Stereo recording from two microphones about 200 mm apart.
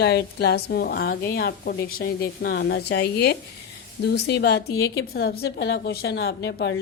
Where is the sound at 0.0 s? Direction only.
55° left (ahead or behind).